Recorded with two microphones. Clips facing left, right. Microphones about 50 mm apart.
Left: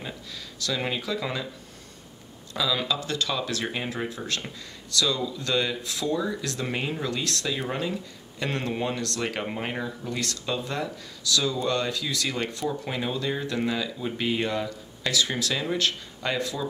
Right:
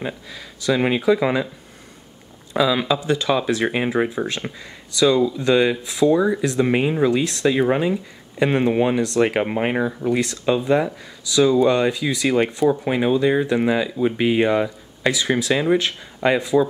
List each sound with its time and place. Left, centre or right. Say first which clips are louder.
0.0 s speech: right 8 dB; right
2.5 s speech: right 8 dB; right